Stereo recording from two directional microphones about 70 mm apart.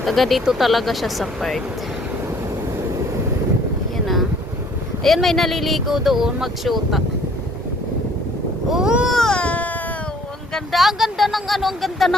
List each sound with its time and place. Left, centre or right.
0.0 s speech: centre
3.9 s vehicle: centre
5.0 s speech: centre
8.7 s baby cry: centre
9.0 s baby cry: centre
9.4 s baby cry: centre
10.5 s speech: centre